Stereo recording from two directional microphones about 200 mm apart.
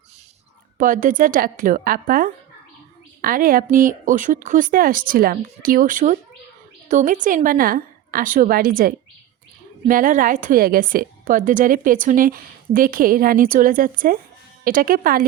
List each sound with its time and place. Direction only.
0.8 s a woman's voice: 40° right (ahead or behind)